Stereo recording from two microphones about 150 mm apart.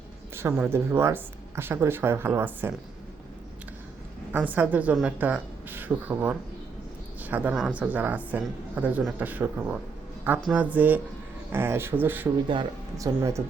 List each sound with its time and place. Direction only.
0.3 s speech: 15° right (ahead or behind)
4.3 s speech: 10° right (ahead or behind)